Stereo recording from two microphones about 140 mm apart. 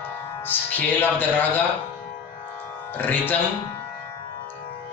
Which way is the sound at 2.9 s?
15° left (ahead or behind).